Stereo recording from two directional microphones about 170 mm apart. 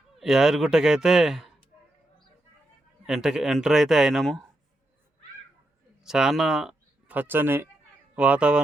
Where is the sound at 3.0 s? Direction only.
5° right (ahead or behind).